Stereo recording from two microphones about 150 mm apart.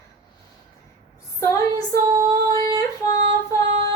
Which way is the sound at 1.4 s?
20° left (ahead or behind).